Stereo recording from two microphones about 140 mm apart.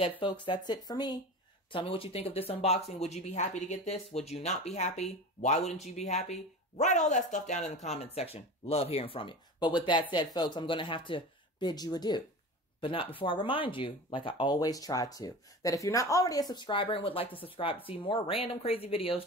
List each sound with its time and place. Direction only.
0.2 s speech: 35° left (ahead or behind)
1.7 s speech: 40° left (ahead or behind)